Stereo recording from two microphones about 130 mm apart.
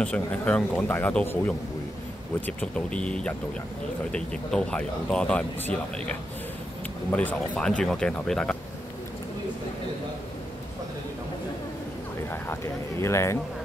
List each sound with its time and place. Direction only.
0.0 s speech: 10° left (ahead or behind)
2.4 s speech: 10° left (ahead or behind)
12.3 s a sound: 20° left (ahead or behind)